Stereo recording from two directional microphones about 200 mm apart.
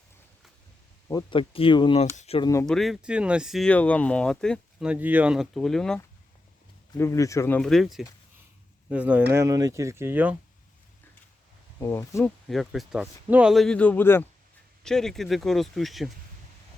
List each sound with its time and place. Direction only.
1.0 s speech: 20° left (ahead or behind)
2.6 s speech: centre (ahead or behind)
6.9 s speech: 15° left (ahead or behind); by 10.3 s 10° right (ahead or behind)
11.8 s speech: 15° left (ahead or behind)
12.5 s speech: centre (ahead or behind)